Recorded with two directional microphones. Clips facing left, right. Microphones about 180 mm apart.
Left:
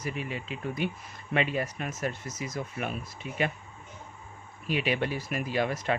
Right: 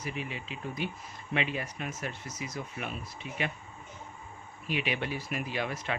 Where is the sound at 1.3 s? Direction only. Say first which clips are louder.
Left 4 dB; 45° left (ahead or behind).